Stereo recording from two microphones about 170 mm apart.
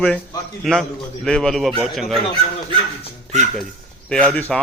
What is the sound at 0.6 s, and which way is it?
A man's voice, centre (ahead or behind).